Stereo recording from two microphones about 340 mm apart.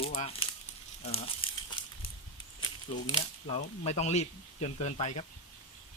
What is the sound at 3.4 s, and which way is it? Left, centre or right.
Speech, centre.